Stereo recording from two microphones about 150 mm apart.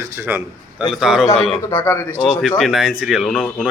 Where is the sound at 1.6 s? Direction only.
15° left (ahead or behind).